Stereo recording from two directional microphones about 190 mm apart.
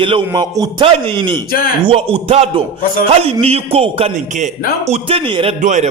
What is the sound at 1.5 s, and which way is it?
Speech, 50° left (ahead or behind).